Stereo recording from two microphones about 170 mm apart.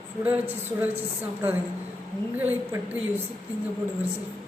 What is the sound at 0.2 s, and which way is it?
A woman's voice, 10° right (ahead or behind).